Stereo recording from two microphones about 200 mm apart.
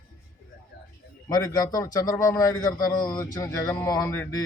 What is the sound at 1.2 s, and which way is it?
A man's voice, 15° left (ahead or behind).